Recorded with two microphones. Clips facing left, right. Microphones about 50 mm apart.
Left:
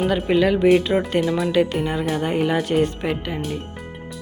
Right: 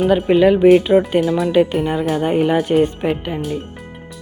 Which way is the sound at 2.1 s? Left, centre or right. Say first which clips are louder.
Right 5 dB; centre.